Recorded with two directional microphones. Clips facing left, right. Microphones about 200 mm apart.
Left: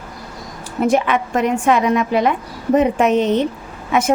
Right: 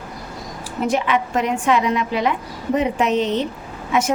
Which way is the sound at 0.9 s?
50° left (ahead or behind).